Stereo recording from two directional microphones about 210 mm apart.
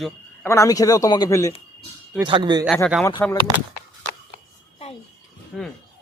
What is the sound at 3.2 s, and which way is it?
Speech, 10° left (ahead or behind).